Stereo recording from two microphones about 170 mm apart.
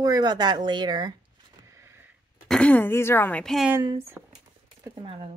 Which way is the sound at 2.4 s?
5° left (ahead or behind).